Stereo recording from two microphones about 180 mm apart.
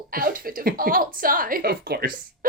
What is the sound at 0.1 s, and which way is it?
Speech, 55° right (ahead or behind).